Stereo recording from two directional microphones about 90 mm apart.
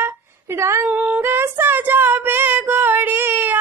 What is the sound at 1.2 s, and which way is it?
Child singing, 25° right (ahead or behind).